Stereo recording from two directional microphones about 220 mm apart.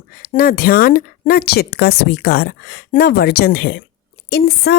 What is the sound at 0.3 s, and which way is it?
A woman's voice, 45° left (ahead or behind).